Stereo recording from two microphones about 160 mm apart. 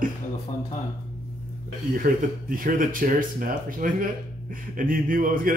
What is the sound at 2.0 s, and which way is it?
Speech, 60° right (ahead or behind).